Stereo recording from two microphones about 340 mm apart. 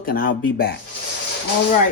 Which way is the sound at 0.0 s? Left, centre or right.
Left.